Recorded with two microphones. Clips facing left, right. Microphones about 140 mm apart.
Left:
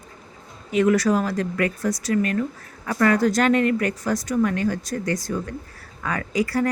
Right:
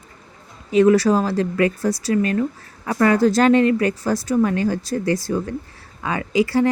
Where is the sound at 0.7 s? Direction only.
30° right (ahead or behind).